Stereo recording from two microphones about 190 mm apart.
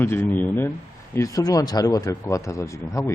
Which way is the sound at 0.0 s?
10° left (ahead or behind).